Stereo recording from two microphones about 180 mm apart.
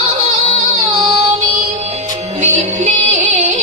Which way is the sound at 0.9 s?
30° right (ahead or behind).